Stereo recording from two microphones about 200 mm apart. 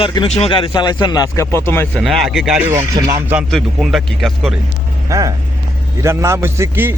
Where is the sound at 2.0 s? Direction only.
Centre (ahead or behind).